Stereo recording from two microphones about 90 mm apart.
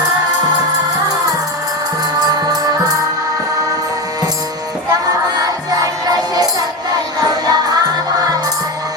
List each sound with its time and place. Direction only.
2.1 s music: 50° right (ahead or behind)
5.0 s music: 45° right (ahead or behind)